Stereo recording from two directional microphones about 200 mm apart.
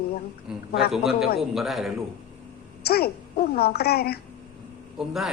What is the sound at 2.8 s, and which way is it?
A woman's voice, 50° left (ahead or behind).